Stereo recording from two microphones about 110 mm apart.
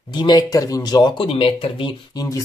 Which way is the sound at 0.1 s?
40° left (ahead or behind).